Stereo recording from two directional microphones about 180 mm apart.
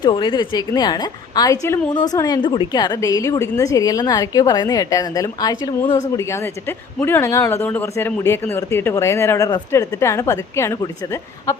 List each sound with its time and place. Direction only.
0.0 s a woman's voice: 25° left (ahead or behind)